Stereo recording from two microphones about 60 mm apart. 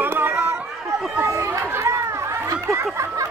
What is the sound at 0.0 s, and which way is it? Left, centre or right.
Chatter, right.